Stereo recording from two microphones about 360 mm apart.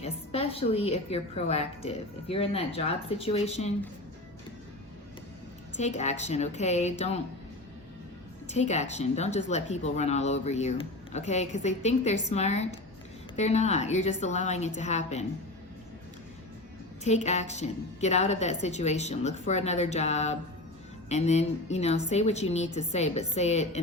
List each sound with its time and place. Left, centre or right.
0.0 s a woman's voice: centre
5.7 s speech: centre
8.4 s speech: centre
17.0 s a woman's voice: centre